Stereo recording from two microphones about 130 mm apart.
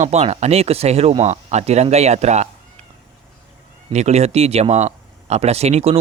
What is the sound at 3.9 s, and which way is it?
Speech, 55° right (ahead or behind).